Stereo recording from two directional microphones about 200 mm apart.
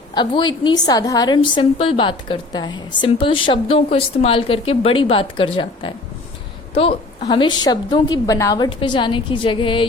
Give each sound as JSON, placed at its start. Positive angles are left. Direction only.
{"t": 0.1, "sound": "a woman's voice", "side_deg": 25}